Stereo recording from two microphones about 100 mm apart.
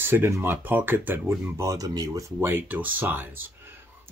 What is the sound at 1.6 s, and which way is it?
Speech, 40° right (ahead or behind).